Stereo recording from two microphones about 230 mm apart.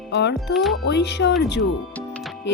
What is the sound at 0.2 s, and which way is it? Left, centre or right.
Speech, left.